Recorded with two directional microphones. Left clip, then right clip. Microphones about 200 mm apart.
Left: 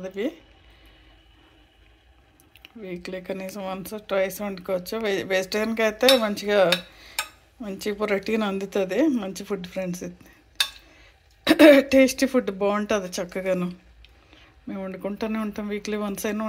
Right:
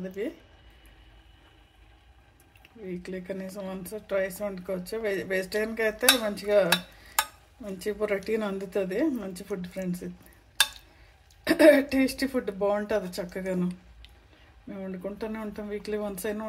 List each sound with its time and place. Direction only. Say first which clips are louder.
2.8 s speech: left 3 dB; 25° left (ahead or behind)
11.4 s speech: left 5 dB; 30° left (ahead or behind)
14.7 s speech: left 5 dB; 30° left (ahead or behind)